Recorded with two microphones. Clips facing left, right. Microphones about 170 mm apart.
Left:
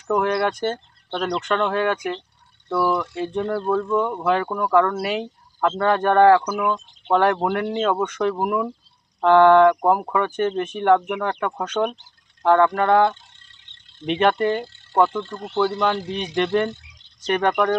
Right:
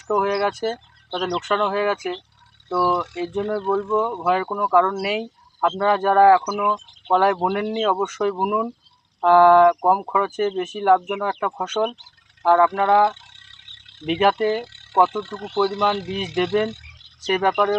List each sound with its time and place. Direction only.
0.1 s speech: 5° right (ahead or behind)
13.1 s a sound: 70° right (ahead or behind)
14.0 s speech: 5° right (ahead or behind)